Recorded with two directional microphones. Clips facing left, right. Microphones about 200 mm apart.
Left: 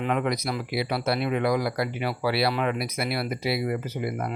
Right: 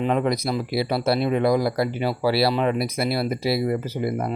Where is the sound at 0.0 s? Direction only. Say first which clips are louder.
Right 4 dB; 30° right (ahead or behind).